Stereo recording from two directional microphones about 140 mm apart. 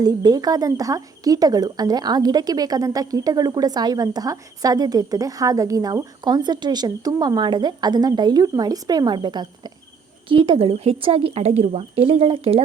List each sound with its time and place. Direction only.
0.0 s speech: 30° right (ahead or behind); by 12.6 s 45° right (ahead or behind)